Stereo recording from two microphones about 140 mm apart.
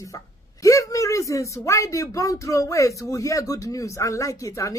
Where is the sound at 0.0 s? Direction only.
25° left (ahead or behind).